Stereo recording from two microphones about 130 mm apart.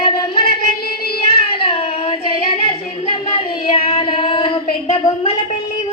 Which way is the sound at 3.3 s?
40° left (ahead or behind).